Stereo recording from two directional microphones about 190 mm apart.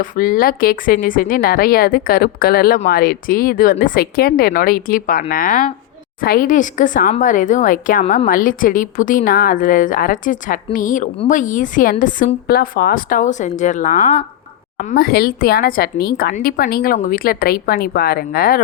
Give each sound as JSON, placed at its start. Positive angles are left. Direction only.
{"t": 0.0, "sound": "a woman's voice", "side_deg": 45}
{"t": 14.8, "sound": "a woman's voice", "side_deg": 50}